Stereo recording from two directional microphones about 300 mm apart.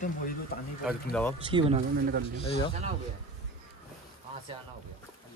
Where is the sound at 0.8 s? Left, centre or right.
Centre.